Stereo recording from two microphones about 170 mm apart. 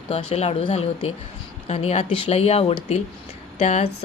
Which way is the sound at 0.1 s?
35° left (ahead or behind).